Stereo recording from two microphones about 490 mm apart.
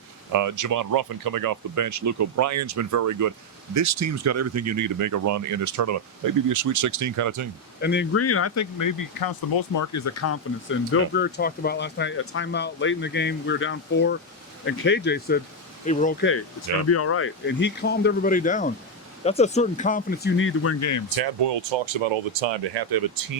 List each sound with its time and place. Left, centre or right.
0.3 s speech: right
7.8 s speech: left
21.2 s speech: right